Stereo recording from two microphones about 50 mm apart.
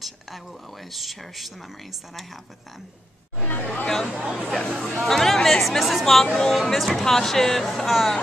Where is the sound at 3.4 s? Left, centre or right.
Left.